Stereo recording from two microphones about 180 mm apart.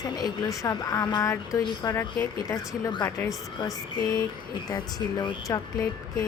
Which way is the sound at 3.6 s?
20° left (ahead or behind).